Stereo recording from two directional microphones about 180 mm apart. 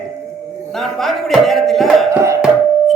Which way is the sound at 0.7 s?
Centre (ahead or behind).